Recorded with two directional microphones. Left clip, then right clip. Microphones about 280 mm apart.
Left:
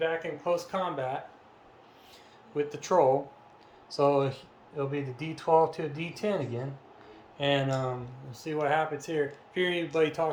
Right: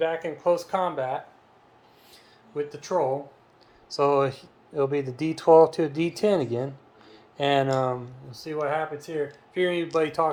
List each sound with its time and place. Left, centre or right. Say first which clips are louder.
0.0 s speech: right 5 dB; right; by 1.2 s centre
2.7 s speech: left 2 dB; centre
3.8 s speech: right 3 dB; centre
8.4 s speech: right 1 dB; centre